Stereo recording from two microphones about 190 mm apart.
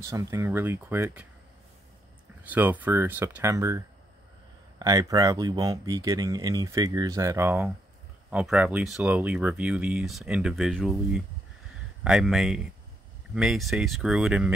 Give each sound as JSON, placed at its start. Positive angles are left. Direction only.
{"t": 0.0, "sound": "speech", "side_deg": -15}
{"t": 2.4, "sound": "speech", "side_deg": -10}